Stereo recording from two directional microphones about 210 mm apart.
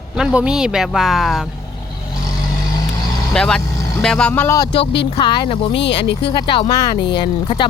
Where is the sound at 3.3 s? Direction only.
5° left (ahead or behind).